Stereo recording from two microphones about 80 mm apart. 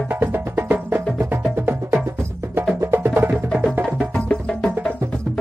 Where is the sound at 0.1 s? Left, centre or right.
Right.